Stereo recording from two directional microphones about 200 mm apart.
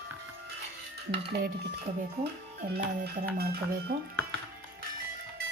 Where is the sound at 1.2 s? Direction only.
55° right (ahead or behind).